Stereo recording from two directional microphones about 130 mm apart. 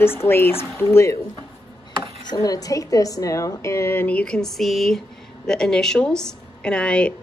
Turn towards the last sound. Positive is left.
turn(degrees=5)  # may be behind; listen again after turning